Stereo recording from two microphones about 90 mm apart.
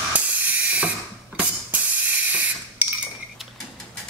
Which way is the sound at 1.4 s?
15° right (ahead or behind).